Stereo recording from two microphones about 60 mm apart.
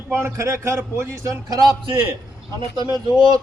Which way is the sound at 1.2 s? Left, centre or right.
Right.